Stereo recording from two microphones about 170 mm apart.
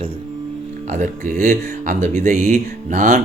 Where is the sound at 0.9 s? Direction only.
50° right (ahead or behind).